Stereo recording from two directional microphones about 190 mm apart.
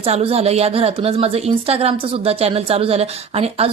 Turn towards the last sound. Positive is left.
turn(degrees=-30)  # may be behind; listen again after turning